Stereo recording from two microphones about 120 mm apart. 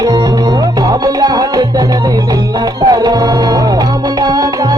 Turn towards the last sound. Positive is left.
turn(degrees=-35)  # may be behind; listen again after turning